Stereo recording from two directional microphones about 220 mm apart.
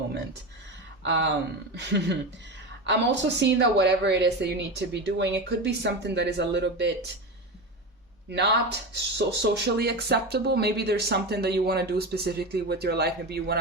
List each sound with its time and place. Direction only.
1.0 s speech: 55° right (ahead or behind)
8.3 s speech: 50° right (ahead or behind)